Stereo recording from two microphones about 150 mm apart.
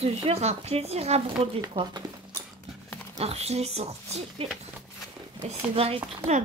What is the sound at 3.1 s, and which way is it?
Speech, 45° right (ahead or behind).